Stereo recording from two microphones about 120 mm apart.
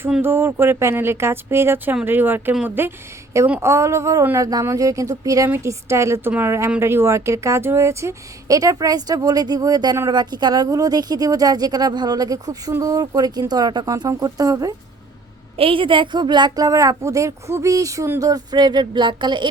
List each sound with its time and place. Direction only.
0.2 s a woman's voice: 20° right (ahead or behind)
15.5 s a woman's voice: 50° right (ahead or behind)